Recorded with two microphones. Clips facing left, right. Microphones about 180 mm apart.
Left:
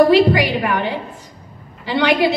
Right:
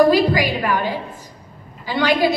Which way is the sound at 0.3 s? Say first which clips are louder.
Left 2 dB; 65° left (ahead or behind).